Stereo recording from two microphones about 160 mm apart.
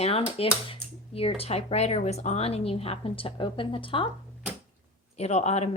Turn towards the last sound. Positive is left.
turn(degrees=45)  # may be behind; listen again after turning